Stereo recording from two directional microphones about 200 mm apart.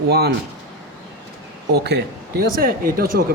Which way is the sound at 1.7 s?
55° right (ahead or behind).